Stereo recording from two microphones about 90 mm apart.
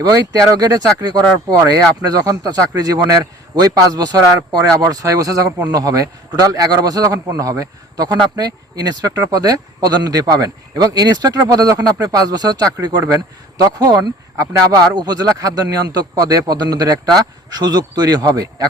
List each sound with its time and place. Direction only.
0.0 s a man's voice: 45° right (ahead or behind)